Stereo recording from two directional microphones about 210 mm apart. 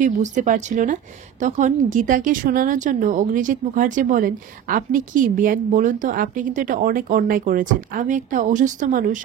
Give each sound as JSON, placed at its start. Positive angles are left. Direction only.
{"t": 0.0, "sound": "a woman's voice", "side_deg": -35}